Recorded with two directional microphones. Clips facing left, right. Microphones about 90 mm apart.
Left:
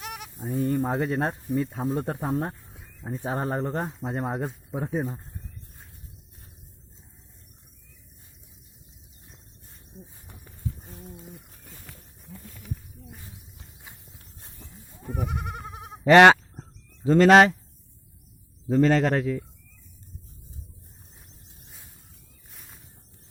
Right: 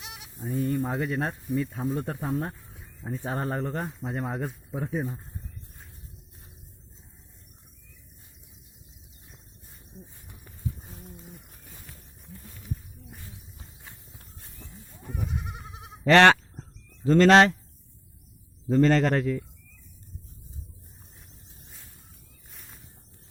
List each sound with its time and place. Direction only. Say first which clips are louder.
0.0 s bleat: left 7 dB; 55° left (ahead or behind)
0.3 s speech: left 2 dB; 40° left (ahead or behind)
2.7 s speech: even; 20° left (ahead or behind)
13.9 s clip-clop: left 1 dB; 10° left (ahead or behind)
15.1 s goat: left 4 dB; 60° left (ahead or behind)
16.0 s goose: left 3 dB; 15° left (ahead or behind)
18.7 s speech: even; 5° left (ahead or behind)
22.5 s a sound: even; centre (ahead or behind)